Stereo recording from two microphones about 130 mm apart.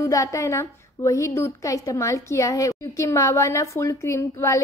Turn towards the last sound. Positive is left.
turn(degrees=25)  # may be behind; listen again after turning